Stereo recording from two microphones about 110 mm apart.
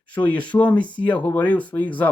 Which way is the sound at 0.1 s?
15° left (ahead or behind).